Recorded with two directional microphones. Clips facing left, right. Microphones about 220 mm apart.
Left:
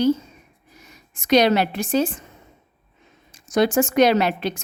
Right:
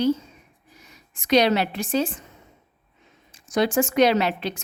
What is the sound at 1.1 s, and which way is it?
A woman's voice, 45° left (ahead or behind).